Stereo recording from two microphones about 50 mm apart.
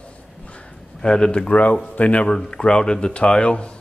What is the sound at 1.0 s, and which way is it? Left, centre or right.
A man's voice, centre.